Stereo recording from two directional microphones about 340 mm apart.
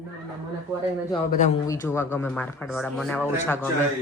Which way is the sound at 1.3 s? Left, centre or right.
Left.